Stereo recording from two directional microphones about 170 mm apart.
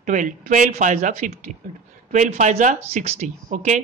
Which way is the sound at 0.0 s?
50° right (ahead or behind).